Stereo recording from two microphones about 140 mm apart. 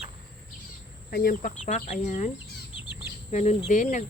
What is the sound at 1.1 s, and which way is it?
Speech, 85° left.